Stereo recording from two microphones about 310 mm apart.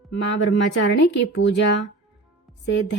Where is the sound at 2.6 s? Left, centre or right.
Left.